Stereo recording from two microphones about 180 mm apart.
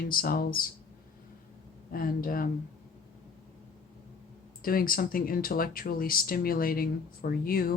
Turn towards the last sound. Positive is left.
turn(degrees=55)  # may be behind; listen again after turning